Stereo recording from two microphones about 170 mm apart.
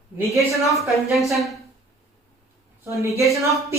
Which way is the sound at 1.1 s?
Centre (ahead or behind).